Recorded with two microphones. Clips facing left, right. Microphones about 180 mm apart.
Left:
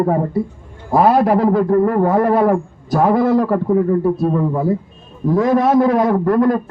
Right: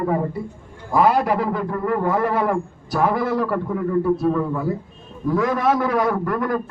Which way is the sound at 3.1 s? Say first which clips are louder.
Left 8 dB; 25° left (ahead or behind).